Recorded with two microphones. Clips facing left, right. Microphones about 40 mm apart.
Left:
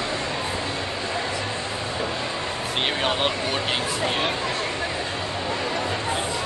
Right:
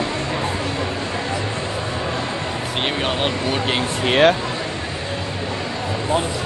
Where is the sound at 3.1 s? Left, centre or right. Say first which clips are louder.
Right 2 dB; centre.